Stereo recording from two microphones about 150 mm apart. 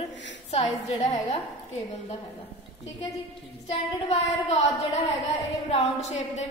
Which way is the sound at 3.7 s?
45° left (ahead or behind).